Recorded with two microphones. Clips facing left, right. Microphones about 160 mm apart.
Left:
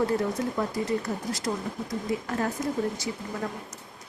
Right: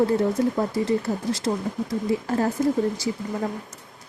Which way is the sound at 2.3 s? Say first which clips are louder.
Right 8 dB; 30° right (ahead or behind).